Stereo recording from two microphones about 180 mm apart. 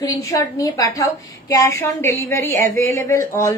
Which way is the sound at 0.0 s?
20° left (ahead or behind).